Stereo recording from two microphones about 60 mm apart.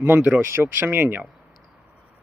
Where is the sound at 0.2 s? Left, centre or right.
Right.